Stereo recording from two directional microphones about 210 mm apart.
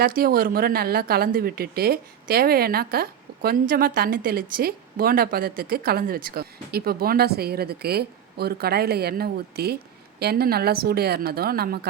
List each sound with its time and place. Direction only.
0.0 s speech: 45° right (ahead or behind)